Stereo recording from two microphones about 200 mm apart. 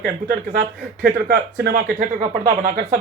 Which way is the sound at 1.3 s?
45° right (ahead or behind).